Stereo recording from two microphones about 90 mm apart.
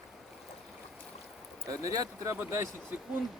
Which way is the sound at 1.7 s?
40° right (ahead or behind).